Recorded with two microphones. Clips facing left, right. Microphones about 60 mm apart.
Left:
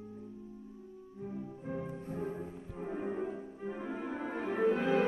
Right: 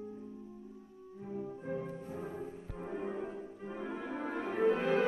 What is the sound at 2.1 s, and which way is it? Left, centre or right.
Music, left.